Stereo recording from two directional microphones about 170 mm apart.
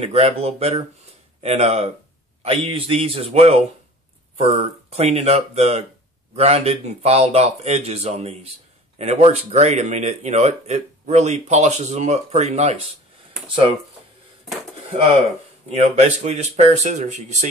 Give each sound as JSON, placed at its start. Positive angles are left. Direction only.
{"t": 0.0, "sound": "speech", "side_deg": -35}
{"t": 15.7, "sound": "speech", "side_deg": -40}